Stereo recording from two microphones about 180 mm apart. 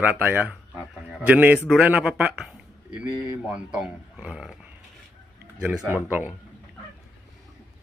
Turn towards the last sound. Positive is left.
turn(degrees=-10)  # may be behind; listen again after turning